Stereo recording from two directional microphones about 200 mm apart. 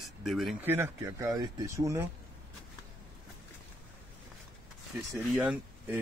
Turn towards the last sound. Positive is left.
turn(degrees=-5)  # may be behind; listen again after turning